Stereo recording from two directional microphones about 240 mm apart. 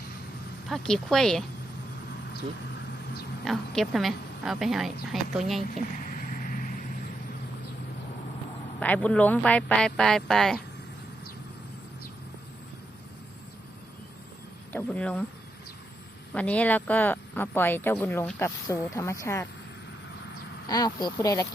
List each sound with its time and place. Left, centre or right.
0.7 s speech: centre
3.4 s speech: centre
6.0 s vehicle: left
8.8 s speech: centre
14.7 s speech: centre
16.3 s speech: centre
20.7 s speech: centre